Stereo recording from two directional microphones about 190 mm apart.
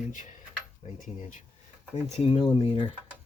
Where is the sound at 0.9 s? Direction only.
45° left (ahead or behind).